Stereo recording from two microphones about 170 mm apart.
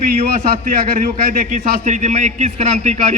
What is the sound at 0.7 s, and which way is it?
A man's voice, 55° right (ahead or behind).